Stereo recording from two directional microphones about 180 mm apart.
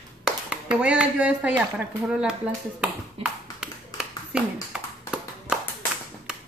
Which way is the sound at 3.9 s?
5° right (ahead or behind).